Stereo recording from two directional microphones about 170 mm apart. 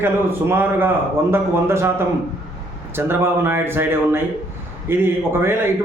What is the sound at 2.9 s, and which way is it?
A man's voice, 15° right (ahead or behind).